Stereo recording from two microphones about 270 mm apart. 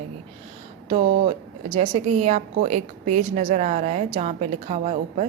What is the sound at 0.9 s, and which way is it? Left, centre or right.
A woman's voice, right.